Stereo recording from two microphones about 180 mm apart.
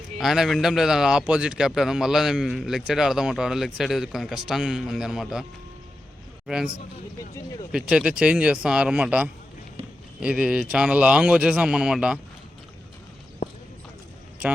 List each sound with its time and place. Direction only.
0.2 s a man's voice: centre (ahead or behind)
7.7 s a man's voice: 5° right (ahead or behind)
13.4 s clip-clop: 50° left (ahead or behind)